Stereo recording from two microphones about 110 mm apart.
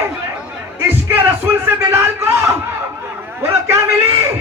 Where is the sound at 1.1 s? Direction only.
20° right (ahead or behind).